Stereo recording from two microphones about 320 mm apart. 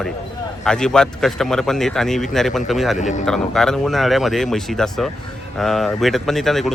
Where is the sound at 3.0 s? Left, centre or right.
Left.